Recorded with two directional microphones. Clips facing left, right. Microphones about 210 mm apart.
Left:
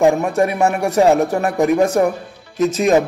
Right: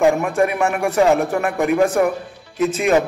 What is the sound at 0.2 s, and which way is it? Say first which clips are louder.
A man's voice: left 2 dB; 35° left (ahead or behind).